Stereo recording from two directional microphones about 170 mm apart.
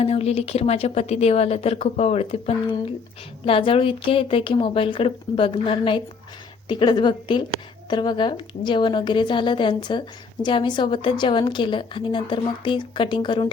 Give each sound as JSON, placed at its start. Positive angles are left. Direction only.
{"t": 0.0, "sound": "a woman's voice", "side_deg": 40}